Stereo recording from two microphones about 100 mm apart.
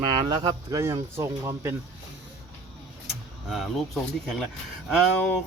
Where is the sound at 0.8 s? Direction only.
30° right (ahead or behind).